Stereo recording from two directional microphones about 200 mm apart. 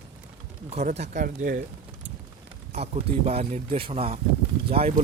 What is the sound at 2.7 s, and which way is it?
Speech, 30° right (ahead or behind).